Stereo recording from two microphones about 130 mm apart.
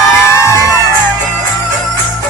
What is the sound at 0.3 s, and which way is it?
Music, 20° left (ahead or behind).